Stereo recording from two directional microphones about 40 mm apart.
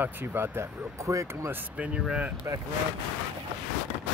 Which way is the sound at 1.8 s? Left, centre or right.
Right.